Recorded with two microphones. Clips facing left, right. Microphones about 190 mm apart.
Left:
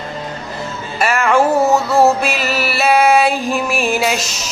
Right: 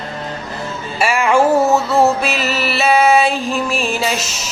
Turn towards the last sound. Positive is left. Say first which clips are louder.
# left 2 dB
turn(degrees=5)  # may be behind; listen again after turning